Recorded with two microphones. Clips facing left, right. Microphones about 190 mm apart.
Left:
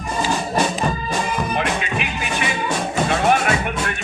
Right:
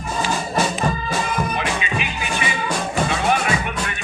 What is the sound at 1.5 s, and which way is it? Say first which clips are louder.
Music: left 2 dB; 55° left (ahead or behind).